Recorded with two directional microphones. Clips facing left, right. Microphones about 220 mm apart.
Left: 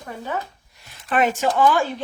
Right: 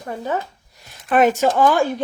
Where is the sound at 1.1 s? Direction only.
40° right (ahead or behind).